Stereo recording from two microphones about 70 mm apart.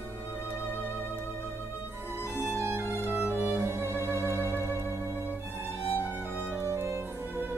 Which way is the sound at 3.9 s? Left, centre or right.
Left.